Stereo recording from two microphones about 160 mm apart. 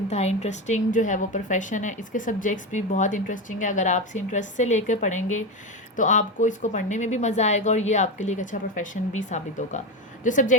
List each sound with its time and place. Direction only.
0.1 s a woman's voice: 45° left (ahead or behind)